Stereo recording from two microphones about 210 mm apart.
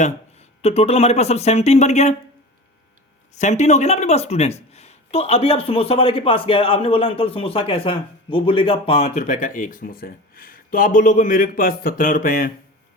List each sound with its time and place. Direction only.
0.0 s speech: 30° left (ahead or behind)
3.3 s speech: 35° left (ahead or behind)